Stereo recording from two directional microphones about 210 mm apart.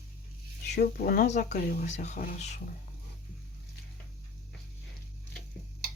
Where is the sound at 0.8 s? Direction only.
45° left (ahead or behind).